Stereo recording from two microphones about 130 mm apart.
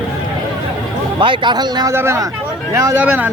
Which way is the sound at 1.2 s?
40° right (ahead or behind).